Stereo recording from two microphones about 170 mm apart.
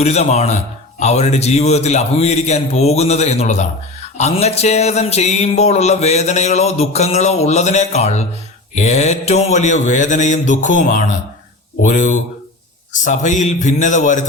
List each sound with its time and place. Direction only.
0.0 s speech: 40° left (ahead or behind)
8.7 s mantra: 40° left (ahead or behind)